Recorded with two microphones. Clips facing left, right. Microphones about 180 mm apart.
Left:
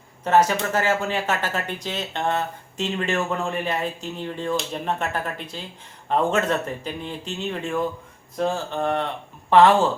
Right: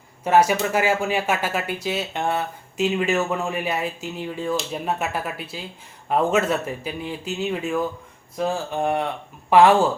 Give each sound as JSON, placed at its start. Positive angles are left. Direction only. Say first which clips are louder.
{"t": 0.3, "sound": "speech", "louder": "right 1 dB", "side_deg": -10}